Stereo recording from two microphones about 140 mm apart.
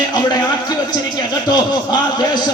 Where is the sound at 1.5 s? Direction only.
30° left (ahead or behind).